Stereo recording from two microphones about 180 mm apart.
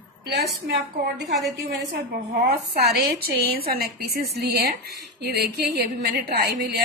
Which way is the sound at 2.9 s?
60° right (ahead or behind).